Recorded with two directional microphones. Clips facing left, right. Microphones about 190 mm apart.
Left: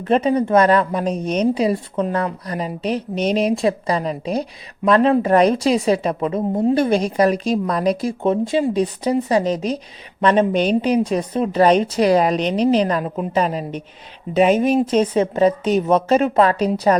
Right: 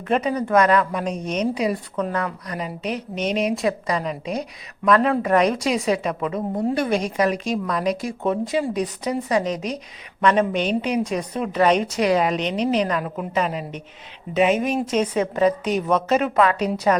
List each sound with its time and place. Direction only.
0.0 s a woman's voice: 30° left (ahead or behind)